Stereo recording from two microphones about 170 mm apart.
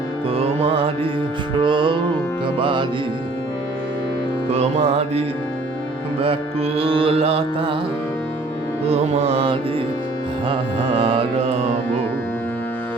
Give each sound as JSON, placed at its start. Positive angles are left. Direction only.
{"t": 0.3, "sound": "music", "side_deg": -35}
{"t": 4.5, "sound": "music", "side_deg": -40}
{"t": 8.9, "sound": "music", "side_deg": -40}